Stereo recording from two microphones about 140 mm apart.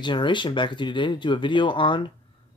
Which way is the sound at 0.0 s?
35° left (ahead or behind).